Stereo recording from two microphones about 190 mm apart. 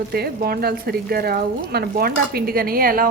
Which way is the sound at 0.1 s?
55° right (ahead or behind).